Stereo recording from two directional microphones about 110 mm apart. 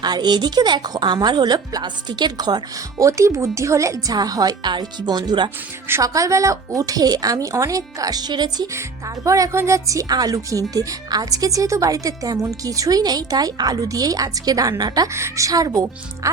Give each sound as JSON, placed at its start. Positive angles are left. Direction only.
{"t": 0.0, "sound": "speech", "side_deg": -40}
{"t": 8.7, "sound": "speech", "side_deg": -30}